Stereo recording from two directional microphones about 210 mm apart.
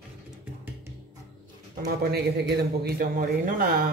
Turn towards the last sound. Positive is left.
turn(degrees=-45)  # may be behind; listen again after turning